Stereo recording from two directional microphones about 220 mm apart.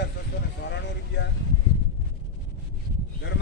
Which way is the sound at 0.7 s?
55° left (ahead or behind).